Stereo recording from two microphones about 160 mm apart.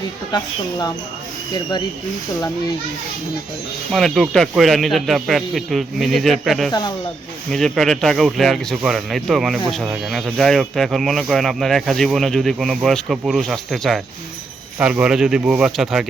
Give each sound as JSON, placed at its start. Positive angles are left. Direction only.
{"t": 0.3, "sound": "a woman's voice", "side_deg": 25}
{"t": 3.9, "sound": "speech", "side_deg": 0}